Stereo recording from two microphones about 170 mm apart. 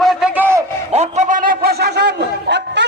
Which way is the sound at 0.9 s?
45° right (ahead or behind).